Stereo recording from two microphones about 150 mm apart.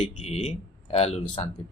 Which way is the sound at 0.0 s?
45° left (ahead or behind).